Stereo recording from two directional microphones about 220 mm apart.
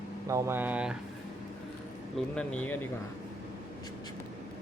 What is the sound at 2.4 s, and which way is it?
Speech, 5° left (ahead or behind).